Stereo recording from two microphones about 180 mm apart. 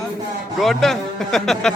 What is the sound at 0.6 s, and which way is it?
A man's voice, centre (ahead or behind).